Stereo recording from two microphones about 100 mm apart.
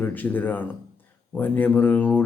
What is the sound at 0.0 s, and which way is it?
Speech, 20° left (ahead or behind).